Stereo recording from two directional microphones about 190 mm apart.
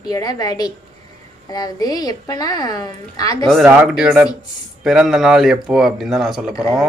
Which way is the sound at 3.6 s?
5° right (ahead or behind).